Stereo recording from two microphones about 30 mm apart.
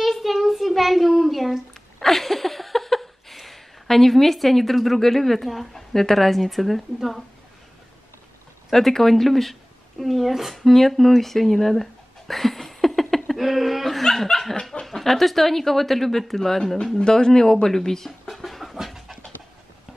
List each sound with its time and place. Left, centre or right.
0.0 s child singing: centre
1.7 s a sound: centre
8.6 s speech: centre
10.5 s speech: centre
13.4 s speech: centre
14.0 s laughter: centre
14.6 s snicker: left
14.9 s speech: centre
17.0 s speech: left
18.2 s a sound: centre